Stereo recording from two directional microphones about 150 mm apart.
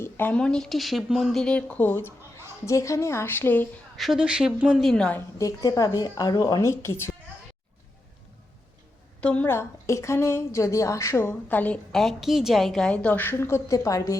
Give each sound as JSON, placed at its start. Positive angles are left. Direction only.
{"t": 0.0, "sound": "a woman's voice", "side_deg": 10}
{"t": 3.9, "sound": "a woman's voice", "side_deg": 0}
{"t": 5.4, "sound": "a woman's voice", "side_deg": 20}
{"t": 9.2, "sound": "a woman's voice", "side_deg": 10}